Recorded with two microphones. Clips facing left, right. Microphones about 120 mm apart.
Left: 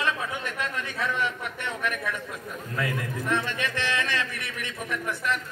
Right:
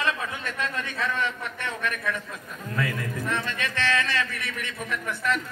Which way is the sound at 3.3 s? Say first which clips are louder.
Left 4 dB; 15° left (ahead or behind).